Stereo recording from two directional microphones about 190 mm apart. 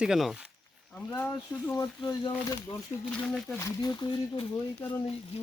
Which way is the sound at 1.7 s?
15° left (ahead or behind).